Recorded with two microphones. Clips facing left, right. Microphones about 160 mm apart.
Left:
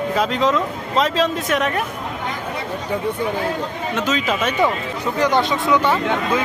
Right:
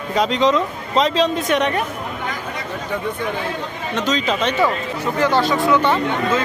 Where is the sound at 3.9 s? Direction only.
10° left (ahead or behind).